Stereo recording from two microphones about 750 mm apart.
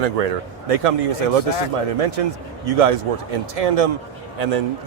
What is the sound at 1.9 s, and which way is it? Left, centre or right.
A man's voice, right.